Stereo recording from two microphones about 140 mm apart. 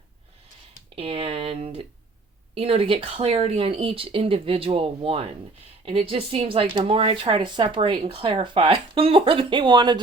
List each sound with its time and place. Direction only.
0.9 s speech: 40° right (ahead or behind)